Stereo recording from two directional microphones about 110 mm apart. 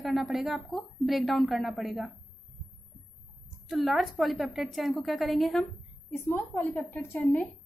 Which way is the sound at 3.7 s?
Centre (ahead or behind).